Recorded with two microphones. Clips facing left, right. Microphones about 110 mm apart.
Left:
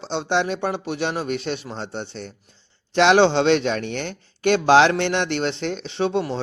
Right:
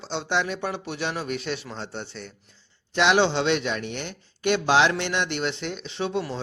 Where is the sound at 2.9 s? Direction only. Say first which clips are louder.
Left 5 dB; 30° left (ahead or behind).